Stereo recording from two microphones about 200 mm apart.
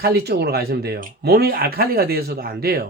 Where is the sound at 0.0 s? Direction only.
55° right (ahead or behind).